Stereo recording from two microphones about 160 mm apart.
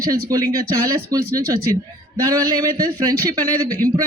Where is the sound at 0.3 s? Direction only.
20° right (ahead or behind).